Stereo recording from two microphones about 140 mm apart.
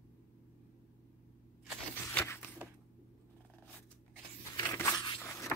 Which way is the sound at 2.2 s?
15° left (ahead or behind).